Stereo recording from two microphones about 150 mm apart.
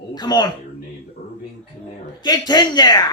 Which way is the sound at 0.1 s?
25° left (ahead or behind).